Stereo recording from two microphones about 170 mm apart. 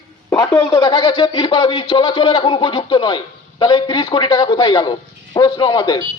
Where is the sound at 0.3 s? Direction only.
15° left (ahead or behind).